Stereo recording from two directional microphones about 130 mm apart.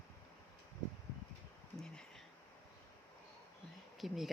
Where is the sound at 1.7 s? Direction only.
5° left (ahead or behind).